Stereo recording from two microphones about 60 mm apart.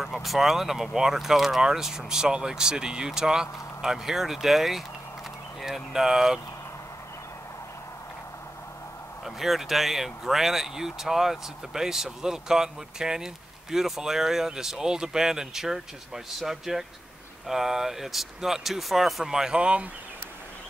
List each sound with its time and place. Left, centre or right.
0.0 s speech: centre
9.2 s speech: centre